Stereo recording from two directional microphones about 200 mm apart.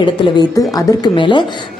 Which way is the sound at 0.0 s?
20° left (ahead or behind).